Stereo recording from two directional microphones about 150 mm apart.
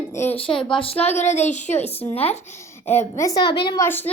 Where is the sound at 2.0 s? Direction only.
10° left (ahead or behind).